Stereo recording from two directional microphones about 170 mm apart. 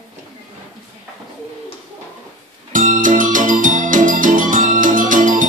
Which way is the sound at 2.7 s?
50° right (ahead or behind).